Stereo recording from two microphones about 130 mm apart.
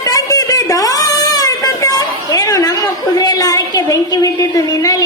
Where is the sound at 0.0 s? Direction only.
30° left (ahead or behind).